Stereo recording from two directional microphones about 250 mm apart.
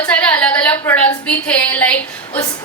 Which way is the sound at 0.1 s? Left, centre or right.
Centre.